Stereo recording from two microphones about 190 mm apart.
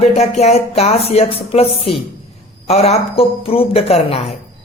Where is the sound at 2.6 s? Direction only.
30° left (ahead or behind).